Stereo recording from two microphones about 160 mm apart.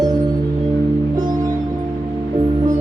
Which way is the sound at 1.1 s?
25° right (ahead or behind).